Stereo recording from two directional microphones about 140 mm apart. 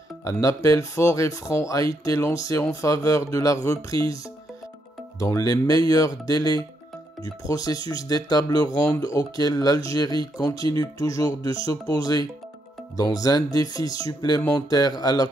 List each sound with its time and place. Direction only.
0.2 s speech: 20° left (ahead or behind)
5.2 s speech: 25° left (ahead or behind)